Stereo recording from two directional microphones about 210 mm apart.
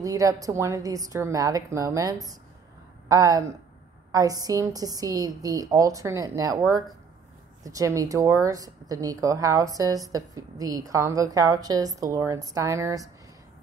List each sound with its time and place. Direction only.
0.0 s a woman's voice: 15° right (ahead or behind)